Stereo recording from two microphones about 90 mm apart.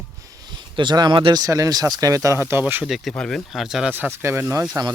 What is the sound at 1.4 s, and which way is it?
Speech, 40° right (ahead or behind).